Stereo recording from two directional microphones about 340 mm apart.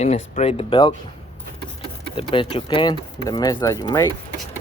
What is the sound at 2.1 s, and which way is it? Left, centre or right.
Speech, centre.